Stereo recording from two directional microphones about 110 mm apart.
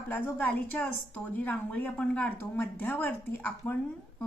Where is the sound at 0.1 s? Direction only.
15° left (ahead or behind).